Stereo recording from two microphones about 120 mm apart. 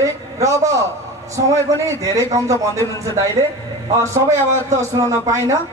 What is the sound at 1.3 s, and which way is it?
A man's voice, 25° right (ahead or behind).